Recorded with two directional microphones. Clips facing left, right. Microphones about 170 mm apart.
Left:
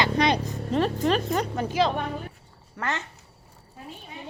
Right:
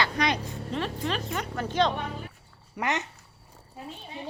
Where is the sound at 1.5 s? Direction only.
10° left (ahead or behind).